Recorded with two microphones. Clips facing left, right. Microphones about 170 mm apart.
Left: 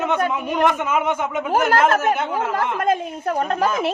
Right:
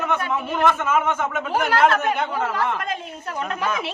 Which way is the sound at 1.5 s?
45° left (ahead or behind).